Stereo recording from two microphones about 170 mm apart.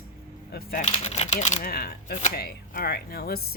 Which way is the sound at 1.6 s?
65° left (ahead or behind).